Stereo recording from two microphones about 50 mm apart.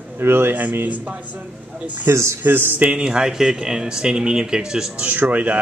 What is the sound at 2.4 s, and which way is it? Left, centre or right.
Speech, right.